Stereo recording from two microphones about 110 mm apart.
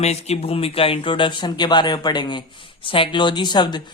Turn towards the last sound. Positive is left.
turn(degrees=40)  # may be behind; listen again after turning